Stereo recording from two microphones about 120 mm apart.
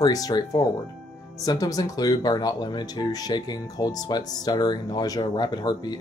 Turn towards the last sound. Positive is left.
turn(degrees=35)  # may be behind; listen again after turning